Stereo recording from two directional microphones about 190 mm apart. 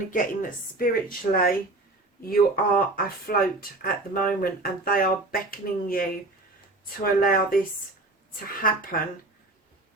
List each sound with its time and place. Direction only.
0.1 s speech: 45° left (ahead or behind)
8.6 s speech: 50° left (ahead or behind)